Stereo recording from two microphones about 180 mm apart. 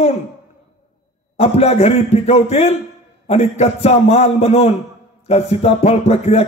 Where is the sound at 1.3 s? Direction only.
35° left (ahead or behind).